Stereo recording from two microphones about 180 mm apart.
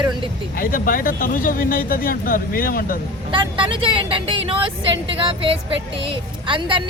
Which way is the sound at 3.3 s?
25° right (ahead or behind).